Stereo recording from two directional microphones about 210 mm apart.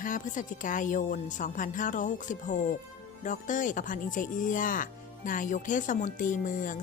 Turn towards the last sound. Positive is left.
turn(degrees=40)  # may be behind; listen again after turning